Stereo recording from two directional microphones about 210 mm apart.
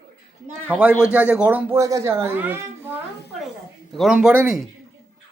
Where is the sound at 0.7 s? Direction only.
5° right (ahead or behind).